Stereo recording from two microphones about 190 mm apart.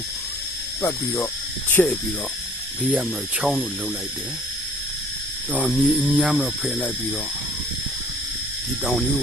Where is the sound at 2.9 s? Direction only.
5° right (ahead or behind).